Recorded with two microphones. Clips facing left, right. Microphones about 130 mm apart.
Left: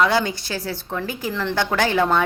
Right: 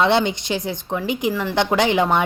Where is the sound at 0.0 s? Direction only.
20° right (ahead or behind).